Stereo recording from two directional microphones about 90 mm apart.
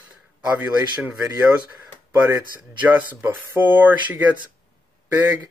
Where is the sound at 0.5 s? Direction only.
20° right (ahead or behind).